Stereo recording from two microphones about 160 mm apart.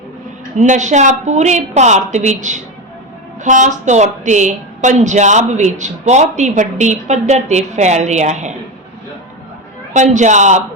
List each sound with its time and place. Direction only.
0.5 s speech: 50° right (ahead or behind)
9.9 s speech: 50° right (ahead or behind)